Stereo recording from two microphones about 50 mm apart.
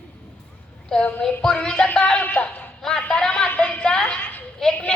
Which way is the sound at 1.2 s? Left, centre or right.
Centre.